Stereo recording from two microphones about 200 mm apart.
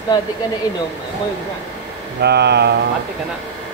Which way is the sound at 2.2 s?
55° right (ahead or behind).